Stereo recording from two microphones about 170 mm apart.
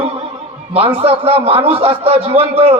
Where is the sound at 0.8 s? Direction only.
35° right (ahead or behind).